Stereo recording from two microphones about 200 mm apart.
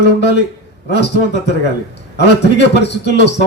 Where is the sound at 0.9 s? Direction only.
60° left (ahead or behind).